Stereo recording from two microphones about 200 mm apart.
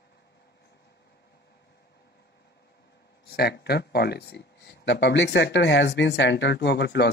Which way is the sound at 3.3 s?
55° left (ahead or behind).